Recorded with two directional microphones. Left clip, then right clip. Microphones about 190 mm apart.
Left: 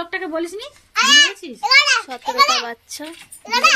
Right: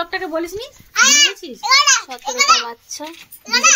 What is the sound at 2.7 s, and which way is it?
Speech, 20° left (ahead or behind).